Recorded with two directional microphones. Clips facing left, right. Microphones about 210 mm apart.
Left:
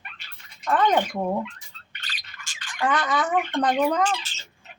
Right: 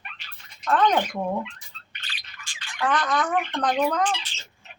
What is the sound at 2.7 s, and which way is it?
Speech, 10° left (ahead or behind).